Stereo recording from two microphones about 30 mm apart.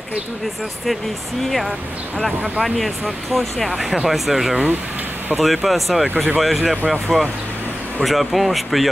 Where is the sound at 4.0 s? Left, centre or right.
Centre.